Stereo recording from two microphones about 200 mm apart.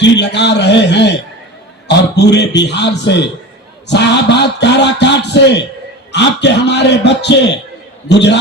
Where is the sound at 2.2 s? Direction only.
55° left (ahead or behind).